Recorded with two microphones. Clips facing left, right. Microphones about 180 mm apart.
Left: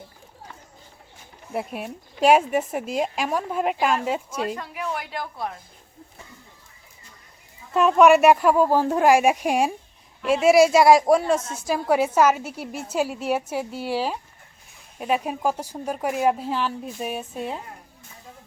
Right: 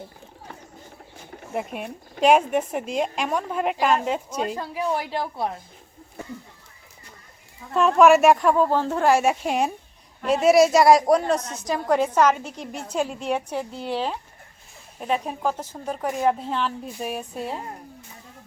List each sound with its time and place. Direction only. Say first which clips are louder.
1.5 s speech: even; 5° left (ahead or behind)
4.5 s a woman's voice: right 4 dB; 30° right (ahead or behind)
7.7 s a woman's voice: even; centre (ahead or behind)